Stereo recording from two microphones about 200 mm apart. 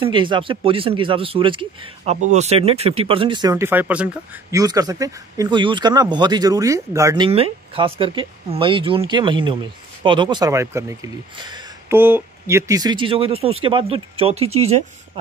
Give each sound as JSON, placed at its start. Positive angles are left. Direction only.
{"t": 0.0, "sound": "speech", "side_deg": -25}
{"t": 7.2, "sound": "speech", "side_deg": -30}